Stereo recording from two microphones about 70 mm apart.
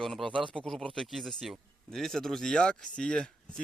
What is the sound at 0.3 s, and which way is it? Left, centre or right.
Speech, centre.